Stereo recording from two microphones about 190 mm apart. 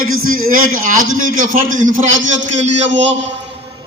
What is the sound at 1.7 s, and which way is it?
Speech, 90° right.